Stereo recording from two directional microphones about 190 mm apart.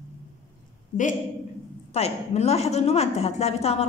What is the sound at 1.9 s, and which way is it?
A woman's voice, 35° left (ahead or behind).